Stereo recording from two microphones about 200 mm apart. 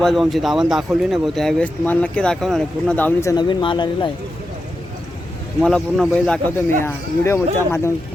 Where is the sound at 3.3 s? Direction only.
20° left (ahead or behind).